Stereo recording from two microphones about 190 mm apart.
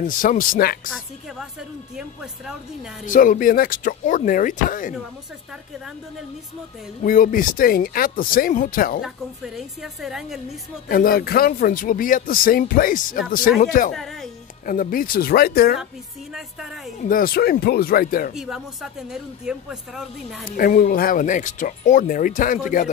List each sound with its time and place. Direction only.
0.0 s speech: 45° left (ahead or behind)
3.1 s speech: 45° left (ahead or behind)
7.0 s speech: 45° left (ahead or behind)
9.0 s speech: centre (ahead or behind)
10.9 s speech: 50° left (ahead or behind)
13.9 s speech: centre (ahead or behind)
14.7 s speech: 45° left (ahead or behind)
17.0 s speech: 50° left (ahead or behind)
18.3 s speech: centre (ahead or behind)
20.5 s speech: 45° left (ahead or behind)